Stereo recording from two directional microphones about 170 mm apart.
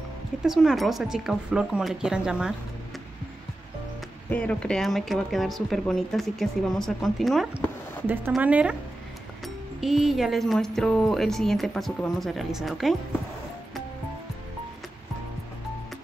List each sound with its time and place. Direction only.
0.4 s speech: centre (ahead or behind)
4.3 s speech: 5° left (ahead or behind); by 8.7 s 10° right (ahead or behind)
9.8 s speech: centre (ahead or behind)